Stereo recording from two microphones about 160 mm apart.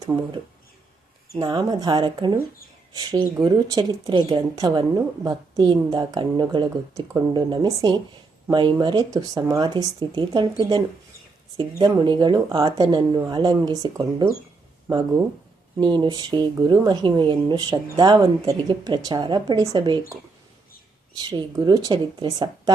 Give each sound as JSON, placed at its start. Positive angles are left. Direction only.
{"t": 1.4, "sound": "a woman's voice", "side_deg": -25}
{"t": 6.7, "sound": "a woman's voice", "side_deg": -15}
{"t": 21.2, "sound": "a woman's voice", "side_deg": -25}